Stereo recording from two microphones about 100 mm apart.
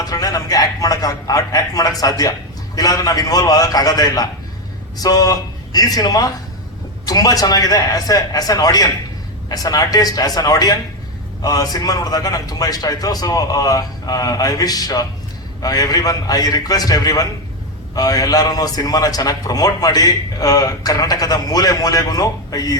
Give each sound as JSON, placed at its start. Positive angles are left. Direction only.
{"t": 0.0, "sound": "a man's voice", "side_deg": 35}